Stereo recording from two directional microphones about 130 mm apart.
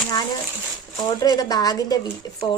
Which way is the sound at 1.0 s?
30° left (ahead or behind).